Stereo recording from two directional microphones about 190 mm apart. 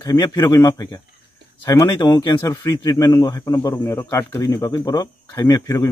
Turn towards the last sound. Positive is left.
turn(degrees=15)  # may be behind; listen again after turning